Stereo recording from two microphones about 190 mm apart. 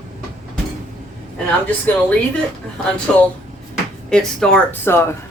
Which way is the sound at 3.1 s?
5° left (ahead or behind).